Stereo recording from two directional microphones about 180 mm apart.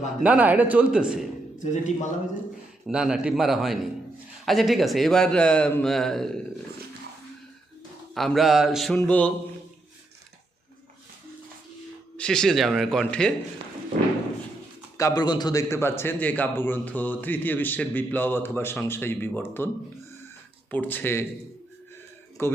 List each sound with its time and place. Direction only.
0.2 s a man's voice: 10° right (ahead or behind)
1.5 s a man's voice: 45° left (ahead or behind)
2.8 s a man's voice: 5° right (ahead or behind)
8.1 s a man's voice: centre (ahead or behind)
12.1 s a man's voice: 5° left (ahead or behind)
14.9 s a man's voice: 20° left (ahead or behind)
22.4 s a man's voice: 15° left (ahead or behind)